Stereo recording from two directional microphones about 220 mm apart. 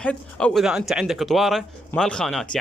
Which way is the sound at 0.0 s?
5° left (ahead or behind).